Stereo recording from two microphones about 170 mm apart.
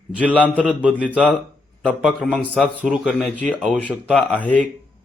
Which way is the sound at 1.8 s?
5° left (ahead or behind).